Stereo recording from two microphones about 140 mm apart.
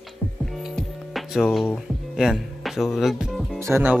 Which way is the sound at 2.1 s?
5° right (ahead or behind).